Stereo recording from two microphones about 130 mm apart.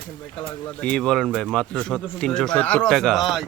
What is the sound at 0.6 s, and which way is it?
Speech, 10° left (ahead or behind).